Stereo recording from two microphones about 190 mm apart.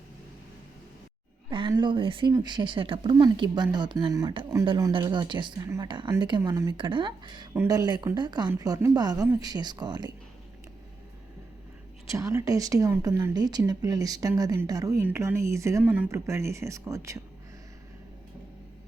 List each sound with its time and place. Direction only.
1.5 s a woman's voice: 25° right (ahead or behind)
12.1 s speech: 15° right (ahead or behind)